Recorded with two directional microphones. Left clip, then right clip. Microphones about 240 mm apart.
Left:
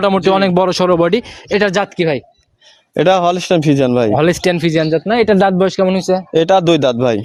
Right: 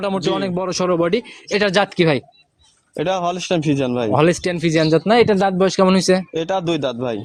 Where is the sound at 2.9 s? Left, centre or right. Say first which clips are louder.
Left 9 dB; left.